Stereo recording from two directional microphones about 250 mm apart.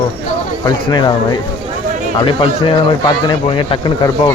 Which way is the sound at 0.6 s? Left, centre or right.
Centre.